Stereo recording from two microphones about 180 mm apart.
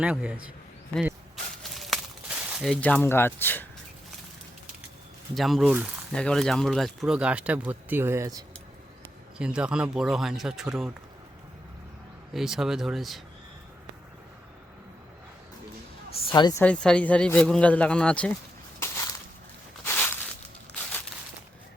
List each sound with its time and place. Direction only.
0.0 s a man's voice: 5° right (ahead or behind)
1.8 s a sound: centre (ahead or behind)
2.8 s speech: 10° left (ahead or behind)
5.3 s speech: centre (ahead or behind); by 8.4 s 20° right (ahead or behind)
9.4 s speech: 5° right (ahead or behind)
12.3 s speech: centre (ahead or behind)
16.2 s a woman's voice: 25° left (ahead or behind)
16.6 s speech: 5° left (ahead or behind)
19.8 s a sound: 10° left (ahead or behind)